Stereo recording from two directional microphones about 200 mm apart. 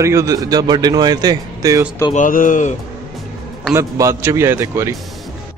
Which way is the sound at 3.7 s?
15° right (ahead or behind).